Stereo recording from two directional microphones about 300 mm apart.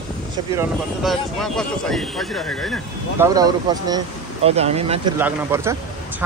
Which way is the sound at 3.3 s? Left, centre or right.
Centre.